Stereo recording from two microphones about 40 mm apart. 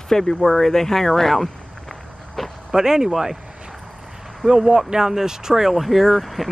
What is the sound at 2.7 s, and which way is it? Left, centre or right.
Speech, centre.